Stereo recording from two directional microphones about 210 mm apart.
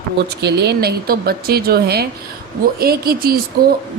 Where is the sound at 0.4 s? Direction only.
50° right (ahead or behind).